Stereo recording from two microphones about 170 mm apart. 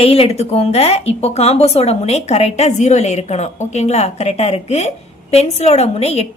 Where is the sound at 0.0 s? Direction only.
35° left (ahead or behind).